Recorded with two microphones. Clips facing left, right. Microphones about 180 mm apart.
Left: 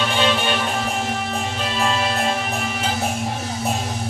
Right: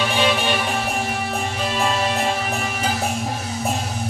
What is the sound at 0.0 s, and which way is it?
Music, 10° right (ahead or behind).